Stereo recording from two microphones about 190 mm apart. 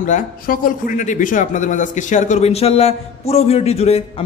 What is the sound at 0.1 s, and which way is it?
Speech, 45° left (ahead or behind).